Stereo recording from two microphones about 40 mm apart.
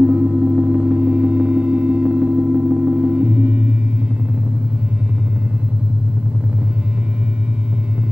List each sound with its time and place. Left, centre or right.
0.0 s gong: right